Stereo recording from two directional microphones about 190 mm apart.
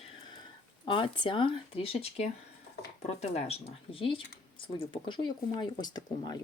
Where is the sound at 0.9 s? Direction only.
25° left (ahead or behind).